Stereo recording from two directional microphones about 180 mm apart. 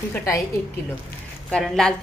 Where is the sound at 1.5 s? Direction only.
5° left (ahead or behind).